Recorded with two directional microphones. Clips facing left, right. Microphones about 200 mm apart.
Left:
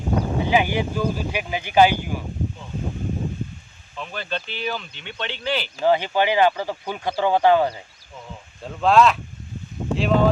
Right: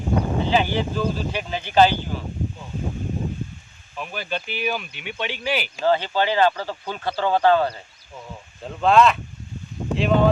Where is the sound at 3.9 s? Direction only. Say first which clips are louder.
Right 1 dB; 10° right (ahead or behind).